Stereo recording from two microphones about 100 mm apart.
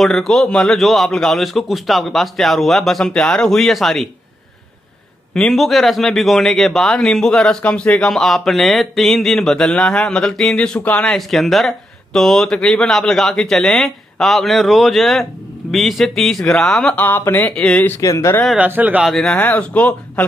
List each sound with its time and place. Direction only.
0.0 s a man's voice: centre (ahead or behind)
5.3 s a man's voice: 5° left (ahead or behind)
11.1 s a man's voice: centre (ahead or behind)
17.0 s speech: 20° left (ahead or behind)
17.8 s speech: 30° left (ahead or behind)
18.6 s a man's voice: 15° right (ahead or behind)
19.0 s a man's voice: 5° left (ahead or behind)
19.3 s speech: 15° left (ahead or behind)